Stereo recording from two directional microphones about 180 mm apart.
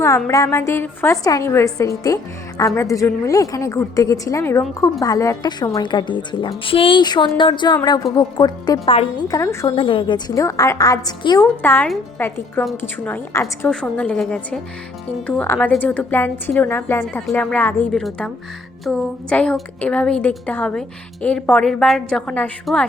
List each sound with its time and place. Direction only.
0.3 s a woman's voice: 15° left (ahead or behind)
9.7 s a woman's voice: 30° left (ahead or behind)
11.6 s a woman's voice: 10° left (ahead or behind)